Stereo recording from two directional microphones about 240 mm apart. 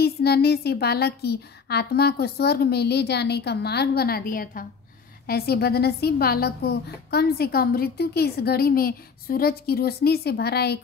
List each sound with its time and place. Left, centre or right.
0.0 s a woman's voice: left